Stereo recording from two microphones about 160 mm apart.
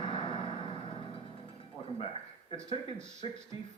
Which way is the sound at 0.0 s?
30° left (ahead or behind).